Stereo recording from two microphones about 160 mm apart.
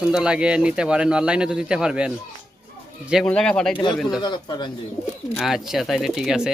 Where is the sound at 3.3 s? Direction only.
5° left (ahead or behind).